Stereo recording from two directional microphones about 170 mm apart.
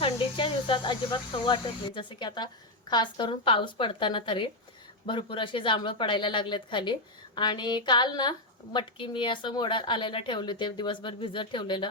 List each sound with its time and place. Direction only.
0.0 s speech: 30° left (ahead or behind)
2.0 s a woman's voice: 30° left (ahead or behind)